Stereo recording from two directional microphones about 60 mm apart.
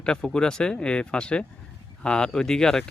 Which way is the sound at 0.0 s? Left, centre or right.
Centre.